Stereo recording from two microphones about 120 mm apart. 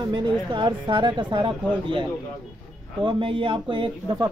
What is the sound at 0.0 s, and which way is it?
A woman's voice, 40° right (ahead or behind).